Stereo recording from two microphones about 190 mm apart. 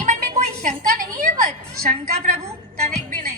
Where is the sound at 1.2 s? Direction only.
40° right (ahead or behind).